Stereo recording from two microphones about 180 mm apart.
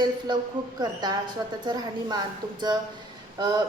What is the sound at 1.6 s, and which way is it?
A woman's voice, 25° right (ahead or behind).